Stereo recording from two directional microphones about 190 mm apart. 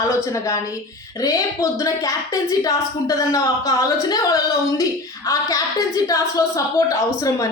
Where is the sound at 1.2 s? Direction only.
15° left (ahead or behind).